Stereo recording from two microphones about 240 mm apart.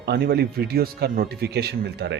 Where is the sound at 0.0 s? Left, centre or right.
Right.